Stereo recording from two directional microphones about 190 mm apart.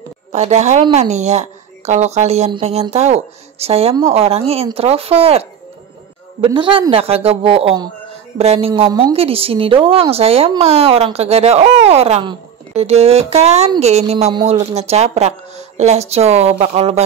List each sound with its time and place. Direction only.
0.3 s a woman's voice: 35° right (ahead or behind)